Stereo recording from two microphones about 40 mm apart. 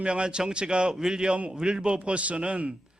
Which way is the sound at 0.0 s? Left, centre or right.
Right.